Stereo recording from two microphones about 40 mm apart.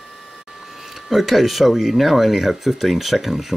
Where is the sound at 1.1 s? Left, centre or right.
Centre.